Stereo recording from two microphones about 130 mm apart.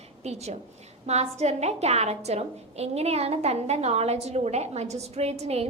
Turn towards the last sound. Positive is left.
turn(degrees=-55)  # may be behind; listen again after turning